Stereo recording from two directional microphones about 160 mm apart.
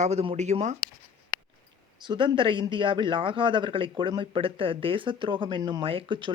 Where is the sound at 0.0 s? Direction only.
40° right (ahead or behind).